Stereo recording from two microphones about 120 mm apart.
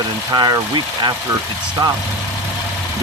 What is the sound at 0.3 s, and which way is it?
Speech, 35° right (ahead or behind).